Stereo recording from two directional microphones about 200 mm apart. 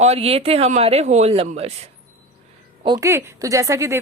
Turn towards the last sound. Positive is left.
turn(degrees=-15)  # may be behind; listen again after turning